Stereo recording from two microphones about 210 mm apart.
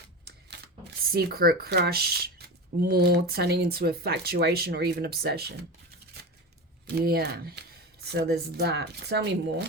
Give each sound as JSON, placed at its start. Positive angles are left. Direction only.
{"t": 1.1, "sound": "speech", "side_deg": -45}
{"t": 6.8, "sound": "speech", "side_deg": -45}